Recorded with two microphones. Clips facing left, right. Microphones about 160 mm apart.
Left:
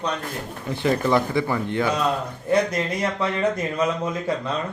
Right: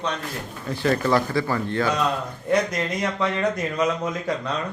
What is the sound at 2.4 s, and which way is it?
Speech, 30° left (ahead or behind).